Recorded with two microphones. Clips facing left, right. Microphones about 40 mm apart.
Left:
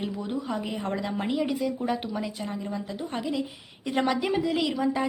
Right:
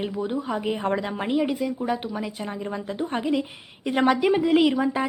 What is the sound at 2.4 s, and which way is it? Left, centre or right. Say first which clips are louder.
A woman's voice: right 2 dB; right.